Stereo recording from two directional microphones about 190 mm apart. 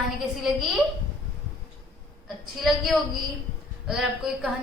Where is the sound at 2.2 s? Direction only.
Centre (ahead or behind).